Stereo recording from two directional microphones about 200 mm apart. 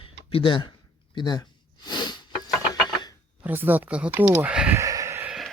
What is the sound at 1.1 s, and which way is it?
Sniff, 20° left (ahead or behind).